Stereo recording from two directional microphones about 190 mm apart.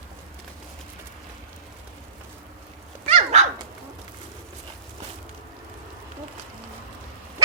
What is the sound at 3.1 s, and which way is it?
Dog, 35° right (ahead or behind).